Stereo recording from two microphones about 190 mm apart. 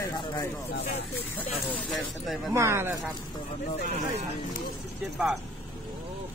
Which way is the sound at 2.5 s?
15° right (ahead or behind).